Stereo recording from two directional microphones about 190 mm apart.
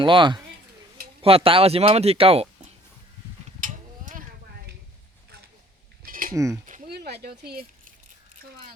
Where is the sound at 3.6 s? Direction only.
45° right (ahead or behind).